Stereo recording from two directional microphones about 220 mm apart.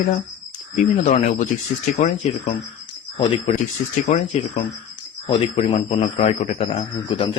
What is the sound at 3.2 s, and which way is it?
Speech, 20° left (ahead or behind).